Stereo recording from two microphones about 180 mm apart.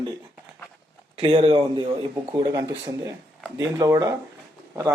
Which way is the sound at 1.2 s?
25° right (ahead or behind).